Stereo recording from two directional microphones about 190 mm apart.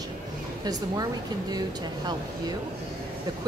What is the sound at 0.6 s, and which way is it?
A woman's voice, 20° right (ahead or behind).